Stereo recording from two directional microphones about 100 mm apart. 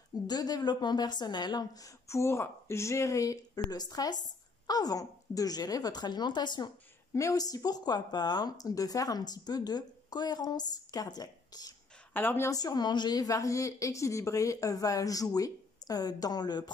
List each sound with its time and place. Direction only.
0.1 s a woman's voice: 40° left (ahead or behind)
7.2 s a woman's voice: 35° left (ahead or behind)
12.1 s a woman's voice: 20° left (ahead or behind)
12.4 s a woman's voice: 40° left (ahead or behind)